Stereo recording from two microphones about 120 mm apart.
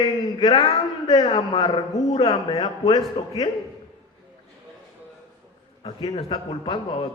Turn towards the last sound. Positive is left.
turn(degrees=40)  # may be behind; listen again after turning